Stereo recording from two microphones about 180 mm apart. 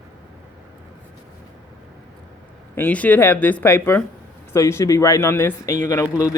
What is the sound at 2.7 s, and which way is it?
A man's voice, 10° left (ahead or behind).